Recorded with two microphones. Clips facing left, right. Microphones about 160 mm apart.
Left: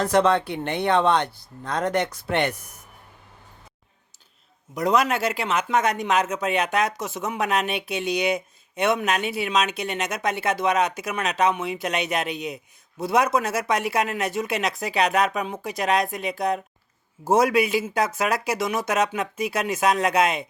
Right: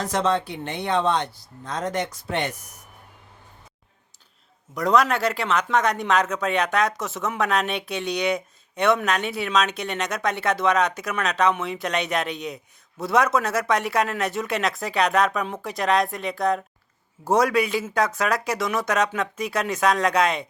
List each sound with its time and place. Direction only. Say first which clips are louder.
0.0 s speech: left 4 dB; 60° left (ahead or behind)
4.9 s speech: right 1 dB; 5° left (ahead or behind)